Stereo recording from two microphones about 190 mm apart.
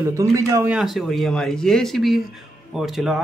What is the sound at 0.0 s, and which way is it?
Speech, 15° right (ahead or behind).